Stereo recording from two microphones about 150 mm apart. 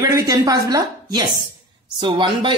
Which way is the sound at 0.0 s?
20° right (ahead or behind).